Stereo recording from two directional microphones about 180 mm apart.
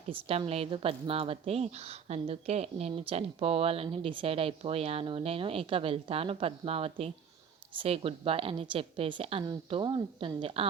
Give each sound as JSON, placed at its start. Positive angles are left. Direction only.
{"t": 0.1, "sound": "speech", "side_deg": -35}